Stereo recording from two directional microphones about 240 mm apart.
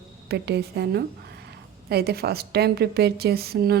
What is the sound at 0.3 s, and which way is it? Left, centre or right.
A woman's voice, right.